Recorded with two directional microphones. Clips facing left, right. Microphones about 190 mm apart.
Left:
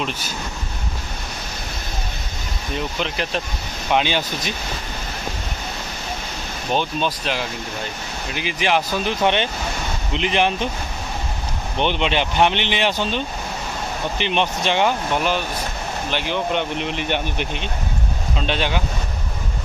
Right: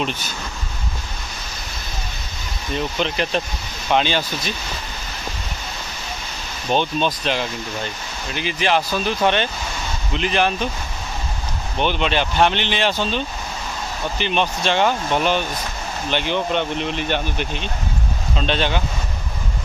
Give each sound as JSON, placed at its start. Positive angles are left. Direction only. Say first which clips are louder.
{"t": 3.0, "sound": "speech", "louder": "right 3 dB", "side_deg": 5}
{"t": 6.7, "sound": "speech", "louder": "right 2 dB", "side_deg": 5}
{"t": 11.8, "sound": "speech", "louder": "even", "side_deg": 20}